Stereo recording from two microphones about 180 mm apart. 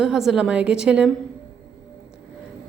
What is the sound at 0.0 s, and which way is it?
A woman's voice, 5° right (ahead or behind).